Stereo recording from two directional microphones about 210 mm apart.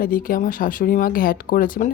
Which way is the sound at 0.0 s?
40° left (ahead or behind).